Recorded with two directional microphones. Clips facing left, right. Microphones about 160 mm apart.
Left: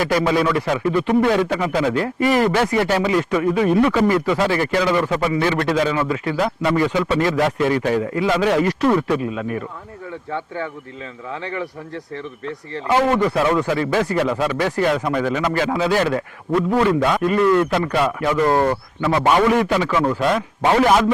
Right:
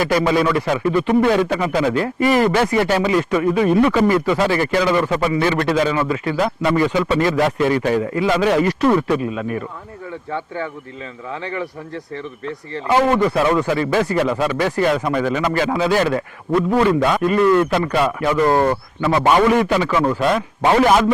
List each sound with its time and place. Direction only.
0.0 s speech: 15° right (ahead or behind)